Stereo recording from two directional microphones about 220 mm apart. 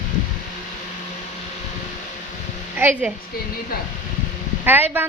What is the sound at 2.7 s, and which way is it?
Speech, 5° right (ahead or behind).